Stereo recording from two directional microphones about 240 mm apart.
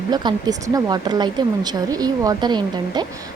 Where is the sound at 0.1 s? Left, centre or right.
Centre.